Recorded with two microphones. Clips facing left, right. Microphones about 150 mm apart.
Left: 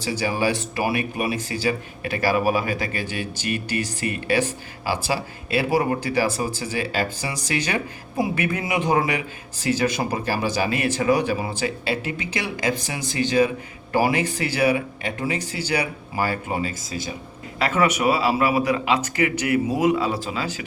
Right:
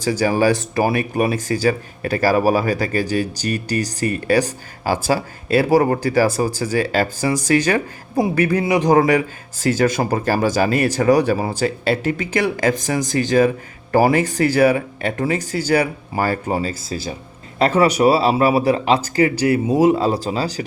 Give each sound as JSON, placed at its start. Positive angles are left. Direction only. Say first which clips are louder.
{"t": 0.0, "sound": "speech", "louder": "right 6 dB", "side_deg": -45}